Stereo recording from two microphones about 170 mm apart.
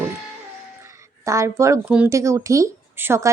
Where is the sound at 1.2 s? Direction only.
15° right (ahead or behind).